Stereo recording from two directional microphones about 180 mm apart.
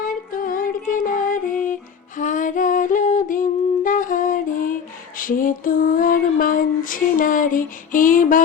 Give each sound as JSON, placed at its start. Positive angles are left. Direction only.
{"t": 0.3, "sound": "music", "side_deg": 50}
{"t": 2.1, "sound": "a sound", "side_deg": 45}
{"t": 3.8, "sound": "music", "side_deg": 45}
{"t": 5.1, "sound": "female singing", "side_deg": 50}